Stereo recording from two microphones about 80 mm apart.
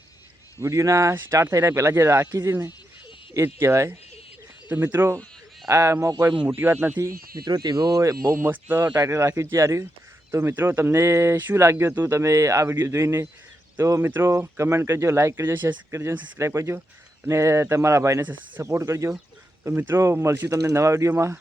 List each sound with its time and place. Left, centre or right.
0.6 s speech: right
6.6 s speech: right
7.0 s speech: right
8.4 s speech: right
9.0 s speech: right
10.5 s speech: right
12.1 s speech: right
18.2 s speech: right
18.6 s speech: right